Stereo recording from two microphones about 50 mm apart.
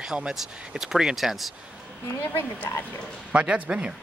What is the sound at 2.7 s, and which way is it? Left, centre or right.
Speech, left.